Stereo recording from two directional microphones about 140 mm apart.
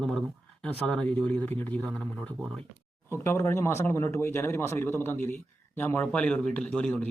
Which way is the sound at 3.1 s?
20° left (ahead or behind).